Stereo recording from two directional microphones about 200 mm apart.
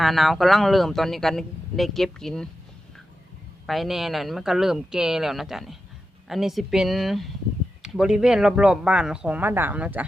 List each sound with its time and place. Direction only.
0.0 s speech: centre (ahead or behind)
3.7 s speech: centre (ahead or behind)